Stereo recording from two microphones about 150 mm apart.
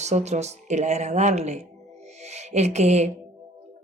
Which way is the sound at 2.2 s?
50° right (ahead or behind).